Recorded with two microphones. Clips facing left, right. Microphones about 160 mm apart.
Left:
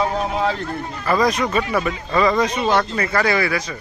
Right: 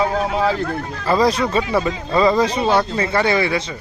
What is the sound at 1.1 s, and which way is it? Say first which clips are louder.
Speech: right 2 dB; 30° right (ahead or behind).